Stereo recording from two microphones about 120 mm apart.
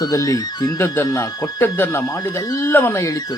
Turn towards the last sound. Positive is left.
turn(degrees=30)  # may be behind; listen again after turning